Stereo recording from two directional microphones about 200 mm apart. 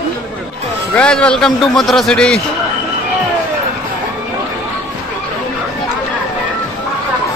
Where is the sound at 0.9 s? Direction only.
5° left (ahead or behind).